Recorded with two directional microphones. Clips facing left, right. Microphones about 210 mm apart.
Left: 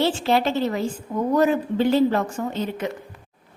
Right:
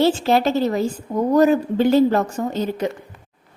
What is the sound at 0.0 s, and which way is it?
Speech, 40° right (ahead or behind).